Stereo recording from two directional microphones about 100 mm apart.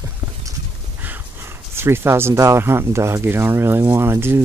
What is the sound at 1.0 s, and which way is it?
Speech, 20° right (ahead or behind).